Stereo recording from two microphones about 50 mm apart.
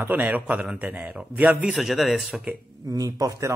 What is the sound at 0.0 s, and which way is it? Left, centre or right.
A man's voice, right.